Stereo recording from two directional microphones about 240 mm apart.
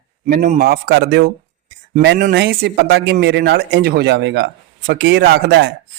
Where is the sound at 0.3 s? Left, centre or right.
Right.